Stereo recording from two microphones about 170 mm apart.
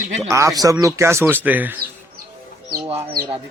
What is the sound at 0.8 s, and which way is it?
Speech, 15° right (ahead or behind).